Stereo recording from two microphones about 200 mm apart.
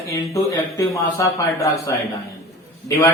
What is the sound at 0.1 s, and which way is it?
Speech, 15° left (ahead or behind).